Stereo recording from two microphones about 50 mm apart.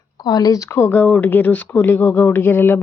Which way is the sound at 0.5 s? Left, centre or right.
Left.